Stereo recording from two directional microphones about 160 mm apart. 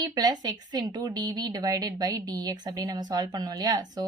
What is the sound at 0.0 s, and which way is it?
Speech, 25° right (ahead or behind).